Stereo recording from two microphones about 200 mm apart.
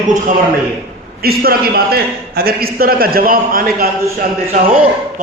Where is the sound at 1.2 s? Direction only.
50° right (ahead or behind).